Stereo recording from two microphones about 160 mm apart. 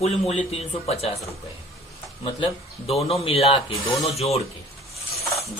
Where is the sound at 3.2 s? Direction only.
40° left (ahead or behind).